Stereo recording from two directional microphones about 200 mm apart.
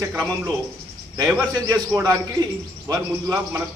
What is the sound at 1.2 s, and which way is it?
A man's voice, 15° right (ahead or behind).